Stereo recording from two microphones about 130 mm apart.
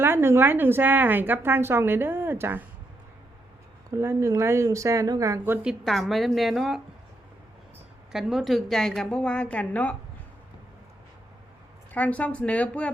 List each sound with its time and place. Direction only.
0.0 s a woman's voice: 20° right (ahead or behind)
3.9 s speech: 20° right (ahead or behind)
5.6 s a woman's voice: centre (ahead or behind)
8.1 s a woman's voice: 5° right (ahead or behind)
11.9 s a woman's voice: 10° left (ahead or behind)